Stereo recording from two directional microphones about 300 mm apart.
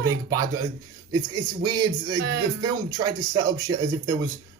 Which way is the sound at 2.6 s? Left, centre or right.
Centre.